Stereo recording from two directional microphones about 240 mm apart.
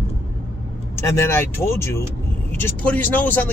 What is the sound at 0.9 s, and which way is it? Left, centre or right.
Speech, centre.